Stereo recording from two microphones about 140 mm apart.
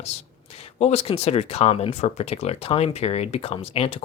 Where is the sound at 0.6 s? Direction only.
50° left (ahead or behind).